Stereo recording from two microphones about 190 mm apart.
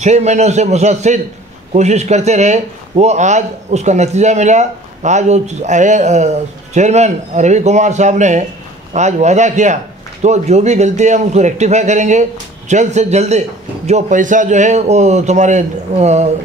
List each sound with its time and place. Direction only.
0.0 s speech: 35° right (ahead or behind)